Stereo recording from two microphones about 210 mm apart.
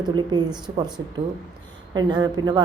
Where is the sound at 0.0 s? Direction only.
20° right (ahead or behind).